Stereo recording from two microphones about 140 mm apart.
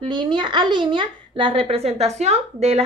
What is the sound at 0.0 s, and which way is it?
A woman's voice, 35° right (ahead or behind).